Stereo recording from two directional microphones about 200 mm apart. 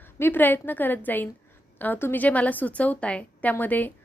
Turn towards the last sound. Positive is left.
turn(degrees=10)  # may be behind; listen again after turning